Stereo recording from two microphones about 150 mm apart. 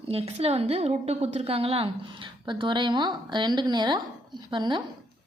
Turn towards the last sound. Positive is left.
turn(degrees=-30)  # may be behind; listen again after turning